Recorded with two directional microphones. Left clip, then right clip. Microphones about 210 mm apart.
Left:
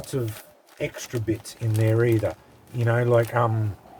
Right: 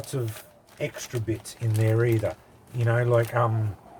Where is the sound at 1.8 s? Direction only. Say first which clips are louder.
Left 3 dB; 40° left (ahead or behind).